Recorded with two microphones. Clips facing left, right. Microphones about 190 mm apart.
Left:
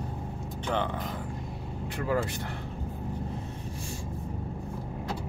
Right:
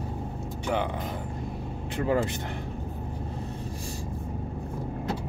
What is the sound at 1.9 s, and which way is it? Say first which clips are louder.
Speech: right 3 dB; 25° right (ahead or behind).